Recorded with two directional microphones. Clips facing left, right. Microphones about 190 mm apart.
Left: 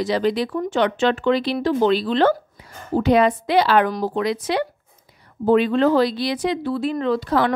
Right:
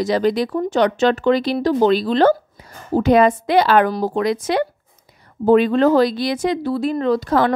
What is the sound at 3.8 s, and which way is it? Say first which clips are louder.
Speech: right 3 dB; 30° right (ahead or behind).